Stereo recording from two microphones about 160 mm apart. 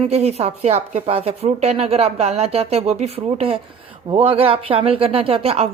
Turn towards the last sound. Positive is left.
turn(degrees=-35)  # may be behind; listen again after turning